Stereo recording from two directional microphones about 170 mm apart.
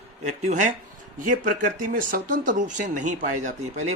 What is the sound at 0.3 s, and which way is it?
Speech, 45° right (ahead or behind).